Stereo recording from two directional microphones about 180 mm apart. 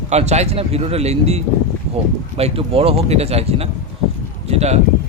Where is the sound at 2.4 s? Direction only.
30° right (ahead or behind).